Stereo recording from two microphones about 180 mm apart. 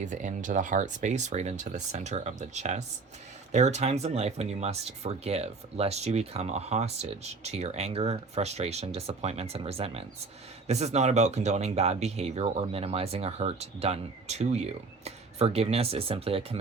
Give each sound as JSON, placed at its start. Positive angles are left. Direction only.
{"t": 0.0, "sound": "speech", "side_deg": -45}